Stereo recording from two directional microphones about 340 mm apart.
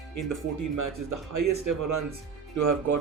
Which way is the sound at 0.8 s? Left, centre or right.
Right.